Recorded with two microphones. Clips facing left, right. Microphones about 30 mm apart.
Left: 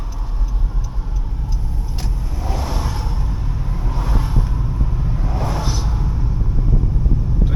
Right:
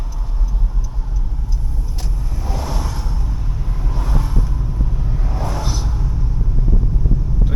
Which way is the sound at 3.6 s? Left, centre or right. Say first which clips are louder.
Left 1 dB; centre.